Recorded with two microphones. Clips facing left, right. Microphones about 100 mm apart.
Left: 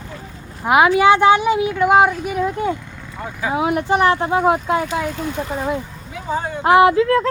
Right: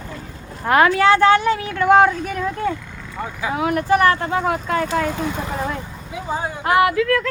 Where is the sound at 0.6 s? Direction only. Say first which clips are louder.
Left 2 dB; 10° left (ahead or behind).